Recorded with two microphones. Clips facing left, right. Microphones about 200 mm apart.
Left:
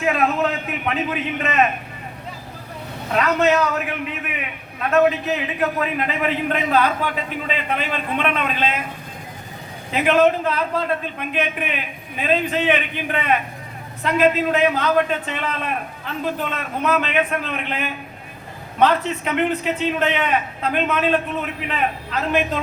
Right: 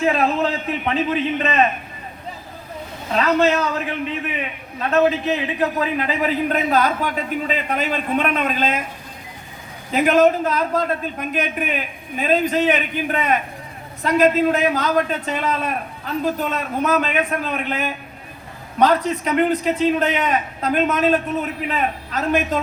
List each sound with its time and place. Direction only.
0.0 s a man's voice: 30° right (ahead or behind)
3.2 s a man's voice: 30° right (ahead or behind)
9.9 s a man's voice: 45° right (ahead or behind)